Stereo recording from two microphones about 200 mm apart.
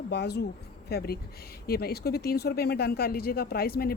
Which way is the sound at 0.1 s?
55° left (ahead or behind).